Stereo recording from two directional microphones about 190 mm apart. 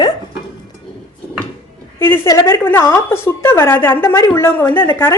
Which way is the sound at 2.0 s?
10° left (ahead or behind).